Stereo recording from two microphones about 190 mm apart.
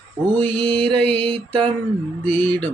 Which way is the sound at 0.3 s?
5° left (ahead or behind).